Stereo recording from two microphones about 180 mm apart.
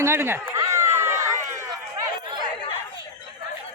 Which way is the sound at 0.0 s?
15° right (ahead or behind).